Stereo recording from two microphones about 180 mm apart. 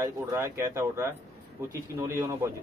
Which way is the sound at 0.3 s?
15° right (ahead or behind).